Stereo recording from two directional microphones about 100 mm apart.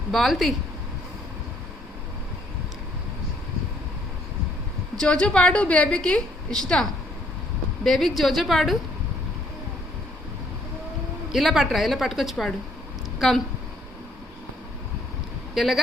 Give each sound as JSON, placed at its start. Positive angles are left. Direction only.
{"t": 0.1, "sound": "a woman's voice", "side_deg": 0}
{"t": 4.9, "sound": "a woman's voice", "side_deg": 10}
{"t": 7.9, "sound": "a woman's voice", "side_deg": 0}
{"t": 11.3, "sound": "a woman's voice", "side_deg": 0}
{"t": 15.5, "sound": "a woman's voice", "side_deg": 0}